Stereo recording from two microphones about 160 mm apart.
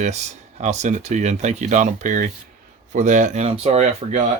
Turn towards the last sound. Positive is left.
turn(degrees=-40)  # may be behind; listen again after turning